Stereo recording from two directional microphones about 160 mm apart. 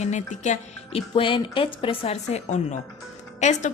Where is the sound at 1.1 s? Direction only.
30° left (ahead or behind).